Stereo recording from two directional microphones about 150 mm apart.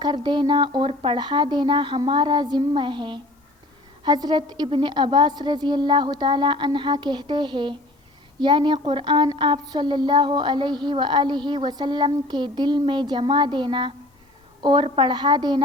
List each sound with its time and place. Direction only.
0.0 s a woman's voice: 30° right (ahead or behind)